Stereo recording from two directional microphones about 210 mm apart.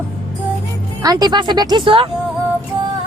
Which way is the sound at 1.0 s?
20° right (ahead or behind).